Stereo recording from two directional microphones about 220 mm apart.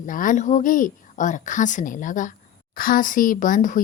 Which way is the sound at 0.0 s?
35° left (ahead or behind).